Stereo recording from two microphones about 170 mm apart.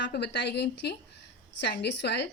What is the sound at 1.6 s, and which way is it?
Speech, 90° left.